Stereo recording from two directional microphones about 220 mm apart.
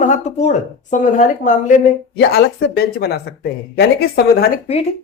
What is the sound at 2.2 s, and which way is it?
Speech, 50° left (ahead or behind).